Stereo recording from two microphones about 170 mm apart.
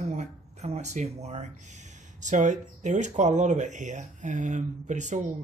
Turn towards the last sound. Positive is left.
turn(degrees=-45)  # may be behind; listen again after turning